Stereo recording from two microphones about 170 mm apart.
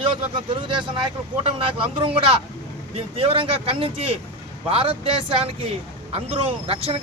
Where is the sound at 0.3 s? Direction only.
30° right (ahead or behind).